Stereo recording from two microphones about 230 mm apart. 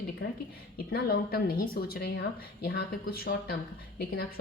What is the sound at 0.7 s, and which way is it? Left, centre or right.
A woman's voice, left.